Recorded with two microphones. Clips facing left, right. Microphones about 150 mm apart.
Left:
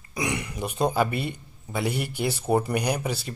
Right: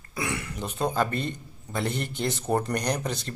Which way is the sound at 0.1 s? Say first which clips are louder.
Left 2 dB; 15° left (ahead or behind).